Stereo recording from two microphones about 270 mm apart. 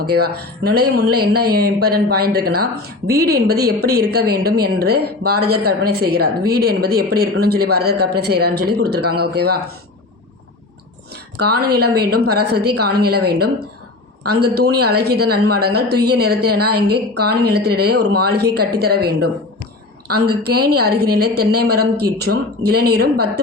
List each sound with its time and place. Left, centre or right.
0.3 s speech: right
11.4 s speech: right
14.4 s speech: right